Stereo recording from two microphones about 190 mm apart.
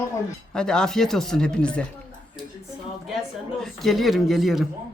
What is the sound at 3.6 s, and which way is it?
Speech, centre (ahead or behind).